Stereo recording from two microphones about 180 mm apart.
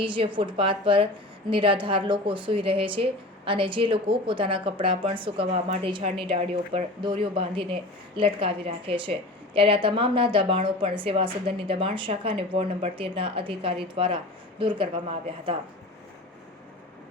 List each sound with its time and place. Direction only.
0.0 s a woman's voice: 25° right (ahead or behind)